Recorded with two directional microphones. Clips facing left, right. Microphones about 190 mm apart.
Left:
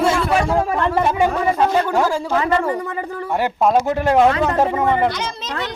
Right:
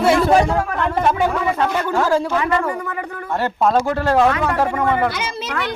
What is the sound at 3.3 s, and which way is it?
Speech, 15° left (ahead or behind).